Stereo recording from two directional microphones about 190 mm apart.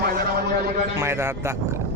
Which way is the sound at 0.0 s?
50° right (ahead or behind).